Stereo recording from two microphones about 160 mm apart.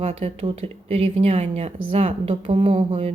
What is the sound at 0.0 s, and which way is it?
A woman's voice, 40° right (ahead or behind).